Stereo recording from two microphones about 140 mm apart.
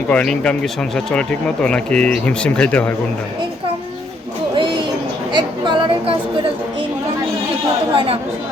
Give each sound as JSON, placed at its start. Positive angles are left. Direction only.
{"t": 0.1, "sound": "speech", "side_deg": 10}
{"t": 4.5, "sound": "a sound", "side_deg": -35}
{"t": 5.3, "sound": "speech", "side_deg": -35}
{"t": 7.9, "sound": "speech", "side_deg": -45}